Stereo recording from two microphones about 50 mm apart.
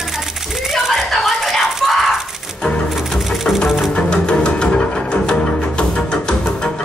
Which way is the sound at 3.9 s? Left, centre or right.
Centre.